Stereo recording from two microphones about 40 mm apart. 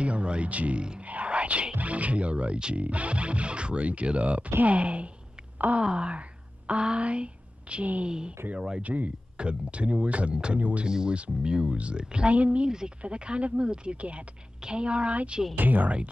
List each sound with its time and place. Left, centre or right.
0.0 s speech: right
1.0 s whispering: right
1.8 s speech: right
8.1 s speech: right
8.8 s speech: right
10.9 s speech: centre
12.6 s speech: centre
15.5 s speech: right